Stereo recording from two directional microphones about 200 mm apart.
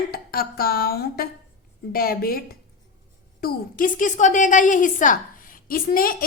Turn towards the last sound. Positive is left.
turn(degrees=45)  # may be behind; listen again after turning